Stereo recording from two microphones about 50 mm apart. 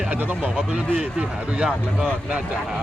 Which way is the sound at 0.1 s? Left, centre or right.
Right.